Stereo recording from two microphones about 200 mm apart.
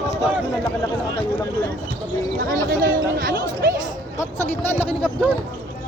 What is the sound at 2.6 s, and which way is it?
Chatter, 45° right (ahead or behind).